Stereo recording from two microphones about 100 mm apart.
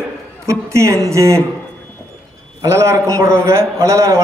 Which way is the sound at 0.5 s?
30° right (ahead or behind).